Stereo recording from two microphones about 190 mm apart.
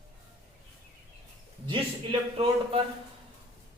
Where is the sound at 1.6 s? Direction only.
25° right (ahead or behind).